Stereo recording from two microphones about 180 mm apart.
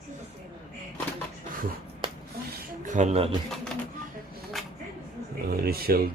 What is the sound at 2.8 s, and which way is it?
Speech, 45° right (ahead or behind).